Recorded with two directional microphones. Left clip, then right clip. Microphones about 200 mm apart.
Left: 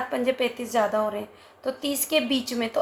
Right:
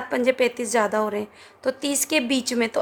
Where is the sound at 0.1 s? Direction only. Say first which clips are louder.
Right 7 dB; 50° right (ahead or behind).